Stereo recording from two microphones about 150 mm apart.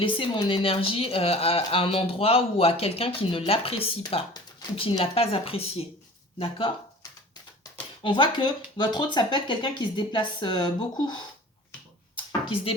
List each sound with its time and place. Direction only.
0.0 s speech: 35° left (ahead or behind)
7.6 s speech: 35° left (ahead or behind)
12.1 s a sound: 35° left (ahead or behind)